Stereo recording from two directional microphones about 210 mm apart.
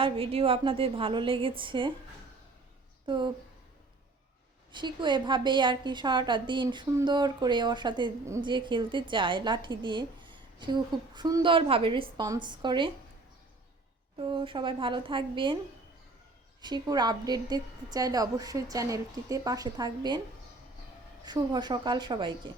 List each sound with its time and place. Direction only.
0.0 s a woman's voice: 25° right (ahead or behind)
3.1 s a woman's voice: 20° right (ahead or behind)
4.7 s a woman's voice: 20° right (ahead or behind)
14.2 s a woman's voice: 25° right (ahead or behind)
16.6 s a woman's voice: 20° right (ahead or behind)
21.2 s a woman's voice: 20° right (ahead or behind)